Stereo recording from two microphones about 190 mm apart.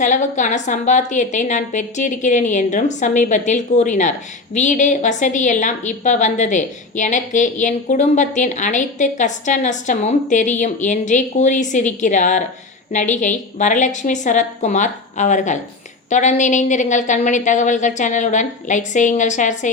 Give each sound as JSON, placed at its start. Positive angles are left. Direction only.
{"t": 0.0, "sound": "a woman's voice", "side_deg": 40}